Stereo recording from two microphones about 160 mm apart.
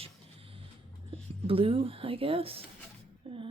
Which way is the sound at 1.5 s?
35° right (ahead or behind).